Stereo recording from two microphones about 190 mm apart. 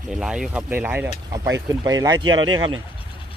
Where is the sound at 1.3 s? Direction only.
15° right (ahead or behind).